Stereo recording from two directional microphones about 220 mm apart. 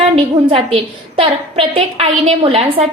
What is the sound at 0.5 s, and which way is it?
A woman's voice, 25° right (ahead or behind).